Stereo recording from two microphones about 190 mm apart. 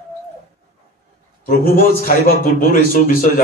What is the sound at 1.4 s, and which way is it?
A man's voice, 50° left (ahead or behind).